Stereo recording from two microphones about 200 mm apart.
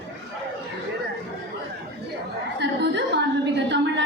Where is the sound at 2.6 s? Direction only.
60° right (ahead or behind).